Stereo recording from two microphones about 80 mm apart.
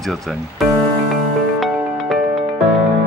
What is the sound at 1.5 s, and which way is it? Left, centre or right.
Music, centre.